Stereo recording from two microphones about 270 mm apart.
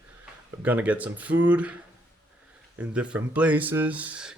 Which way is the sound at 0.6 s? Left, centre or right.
Centre.